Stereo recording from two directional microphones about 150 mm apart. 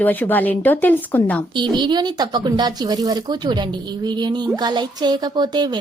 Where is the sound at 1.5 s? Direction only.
30° right (ahead or behind).